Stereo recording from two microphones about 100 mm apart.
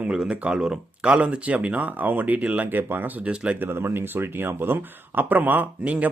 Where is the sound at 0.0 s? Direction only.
10° right (ahead or behind).